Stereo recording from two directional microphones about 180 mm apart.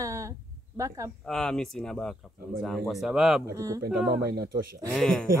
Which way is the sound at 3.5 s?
20° right (ahead or behind).